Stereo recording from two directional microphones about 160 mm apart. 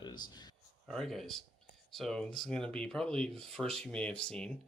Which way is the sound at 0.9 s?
Centre (ahead or behind).